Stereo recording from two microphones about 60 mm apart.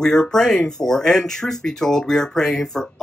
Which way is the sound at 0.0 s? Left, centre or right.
Centre.